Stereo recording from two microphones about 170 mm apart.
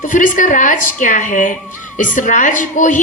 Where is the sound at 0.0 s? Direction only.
50° left (ahead or behind).